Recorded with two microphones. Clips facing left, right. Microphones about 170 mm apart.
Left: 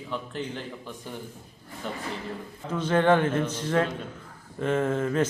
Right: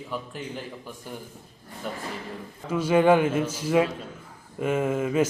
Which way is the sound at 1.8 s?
5° right (ahead or behind).